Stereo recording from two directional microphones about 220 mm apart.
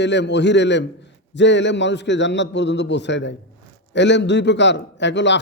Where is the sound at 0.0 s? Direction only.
55° left (ahead or behind).